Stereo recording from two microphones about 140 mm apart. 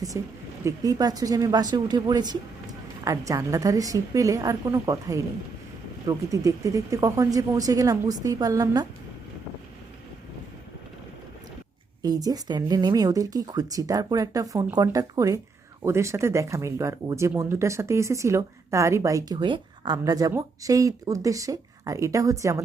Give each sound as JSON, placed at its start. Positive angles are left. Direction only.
{"t": 0.1, "sound": "speech", "side_deg": -20}
{"t": 12.0, "sound": "speech", "side_deg": -25}
{"t": 19.4, "sound": "speech", "side_deg": -35}